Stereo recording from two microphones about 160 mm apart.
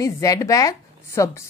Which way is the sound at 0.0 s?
20° left (ahead or behind).